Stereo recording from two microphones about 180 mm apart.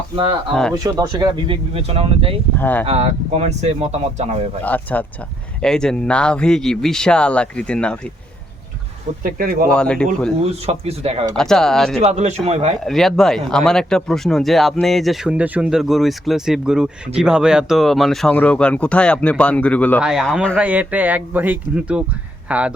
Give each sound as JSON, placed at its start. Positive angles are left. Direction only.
{"t": 0.7, "sound": "speech", "side_deg": -20}
{"t": 2.6, "sound": "speech", "side_deg": 10}
{"t": 2.8, "sound": "speech", "side_deg": -35}
{"t": 4.6, "sound": "speech", "side_deg": 10}
{"t": 9.2, "sound": "speech", "side_deg": -55}
{"t": 9.7, "sound": "speech", "side_deg": 5}
{"t": 10.4, "sound": "speech", "side_deg": -35}
{"t": 11.3, "sound": "speech", "side_deg": 5}
{"t": 11.9, "sound": "speech", "side_deg": -40}
{"t": 12.8, "sound": "speech", "side_deg": 0}
{"t": 20.6, "sound": "speech", "side_deg": -10}